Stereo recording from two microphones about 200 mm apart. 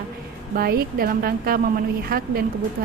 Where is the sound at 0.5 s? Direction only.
50° right (ahead or behind).